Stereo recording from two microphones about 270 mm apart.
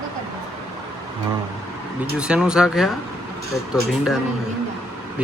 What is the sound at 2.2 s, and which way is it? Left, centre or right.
Speech, centre.